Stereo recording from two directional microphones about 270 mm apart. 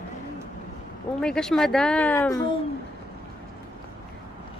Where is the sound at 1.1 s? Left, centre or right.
Centre.